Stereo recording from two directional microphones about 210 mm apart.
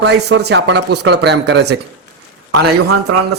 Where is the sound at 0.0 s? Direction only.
55° right (ahead or behind).